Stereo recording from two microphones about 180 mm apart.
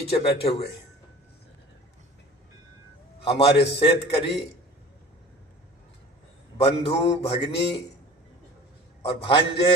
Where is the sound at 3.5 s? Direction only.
70° left (ahead or behind).